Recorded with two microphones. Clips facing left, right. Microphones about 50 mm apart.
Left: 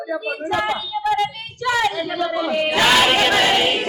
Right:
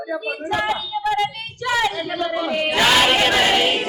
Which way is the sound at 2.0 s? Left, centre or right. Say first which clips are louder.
Left 1 dB; right.